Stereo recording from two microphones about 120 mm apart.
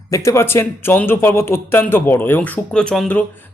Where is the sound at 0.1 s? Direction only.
25° left (ahead or behind).